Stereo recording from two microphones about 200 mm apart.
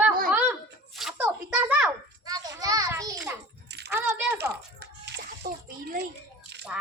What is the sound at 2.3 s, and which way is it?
Children playing, 20° right (ahead or behind).